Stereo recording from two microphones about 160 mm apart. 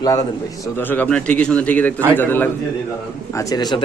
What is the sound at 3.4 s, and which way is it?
Speech, 25° left (ahead or behind).